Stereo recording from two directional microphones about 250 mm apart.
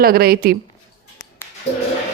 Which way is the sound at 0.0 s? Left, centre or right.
Right.